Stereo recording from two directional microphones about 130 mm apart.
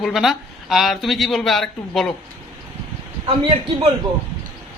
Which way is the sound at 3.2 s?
50° right (ahead or behind).